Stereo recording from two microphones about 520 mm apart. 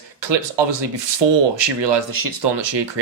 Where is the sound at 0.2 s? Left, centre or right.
Right.